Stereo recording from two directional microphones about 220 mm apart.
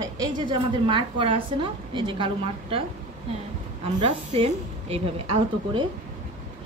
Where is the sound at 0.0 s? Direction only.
20° right (ahead or behind).